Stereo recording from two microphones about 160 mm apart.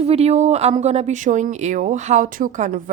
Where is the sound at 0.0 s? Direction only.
40° right (ahead or behind).